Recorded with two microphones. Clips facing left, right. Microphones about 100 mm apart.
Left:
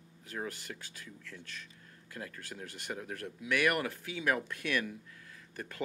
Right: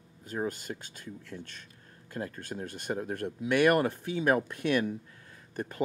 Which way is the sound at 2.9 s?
35° right (ahead or behind).